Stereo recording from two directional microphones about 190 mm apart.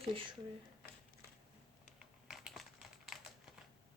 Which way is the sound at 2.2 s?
Centre (ahead or behind).